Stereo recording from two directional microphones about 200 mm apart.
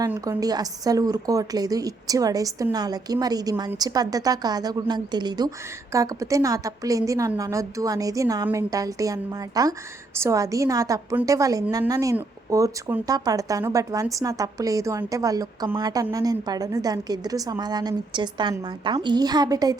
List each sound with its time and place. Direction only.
0.0 s a woman's voice: 15° right (ahead or behind)